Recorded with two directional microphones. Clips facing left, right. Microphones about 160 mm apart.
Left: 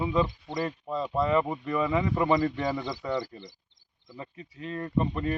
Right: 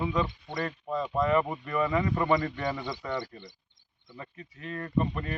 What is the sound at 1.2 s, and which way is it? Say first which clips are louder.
Speech: left 1 dB; 25° left (ahead or behind).